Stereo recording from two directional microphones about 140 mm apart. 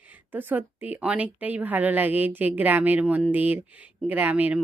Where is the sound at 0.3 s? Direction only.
15° right (ahead or behind).